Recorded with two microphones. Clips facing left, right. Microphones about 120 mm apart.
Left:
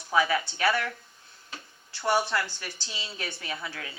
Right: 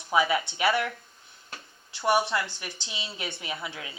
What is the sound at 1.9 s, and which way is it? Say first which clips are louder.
Speech: right 2 dB; 20° right (ahead or behind).